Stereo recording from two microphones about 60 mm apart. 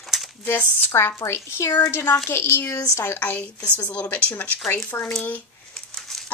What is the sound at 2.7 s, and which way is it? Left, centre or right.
Speech, left.